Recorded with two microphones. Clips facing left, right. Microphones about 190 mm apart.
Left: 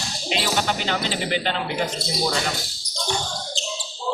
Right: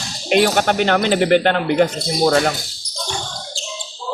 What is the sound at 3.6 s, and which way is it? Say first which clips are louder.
Basketball bounce: left 1 dB; 20° left (ahead or behind).